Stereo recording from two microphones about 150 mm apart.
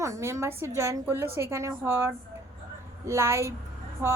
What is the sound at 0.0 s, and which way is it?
A woman's voice, 20° right (ahead or behind).